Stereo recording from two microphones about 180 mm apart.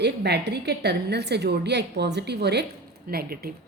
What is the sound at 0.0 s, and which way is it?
A woman's voice, 65° right (ahead or behind).